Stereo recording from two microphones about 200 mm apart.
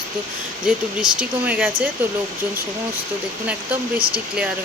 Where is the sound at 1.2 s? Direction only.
5° right (ahead or behind).